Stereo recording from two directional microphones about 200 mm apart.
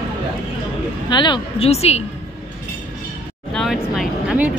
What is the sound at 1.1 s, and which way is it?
Speech, 25° left (ahead or behind).